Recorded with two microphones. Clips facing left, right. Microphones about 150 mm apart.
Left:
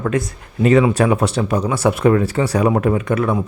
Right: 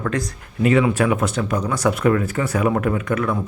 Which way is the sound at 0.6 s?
35° left (ahead or behind).